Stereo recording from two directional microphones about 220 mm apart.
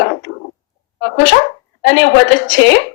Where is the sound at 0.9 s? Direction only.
55° left (ahead or behind).